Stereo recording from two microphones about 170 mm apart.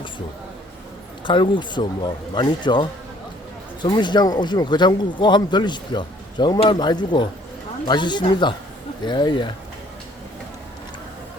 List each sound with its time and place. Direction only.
1.2 s speech: 30° left (ahead or behind)
3.8 s speech: 25° left (ahead or behind)